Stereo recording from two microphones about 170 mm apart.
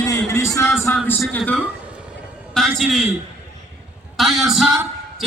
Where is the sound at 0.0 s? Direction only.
15° left (ahead or behind).